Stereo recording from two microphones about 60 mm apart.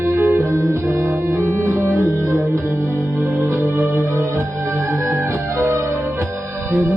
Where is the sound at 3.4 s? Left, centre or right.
Right.